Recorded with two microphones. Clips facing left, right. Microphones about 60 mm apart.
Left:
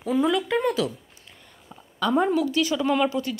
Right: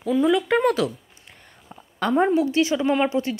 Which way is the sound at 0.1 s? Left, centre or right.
Centre.